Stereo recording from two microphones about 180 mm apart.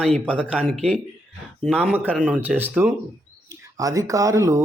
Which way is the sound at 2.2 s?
5° right (ahead or behind).